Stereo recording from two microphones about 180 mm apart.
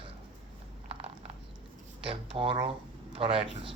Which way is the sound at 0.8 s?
30° right (ahead or behind).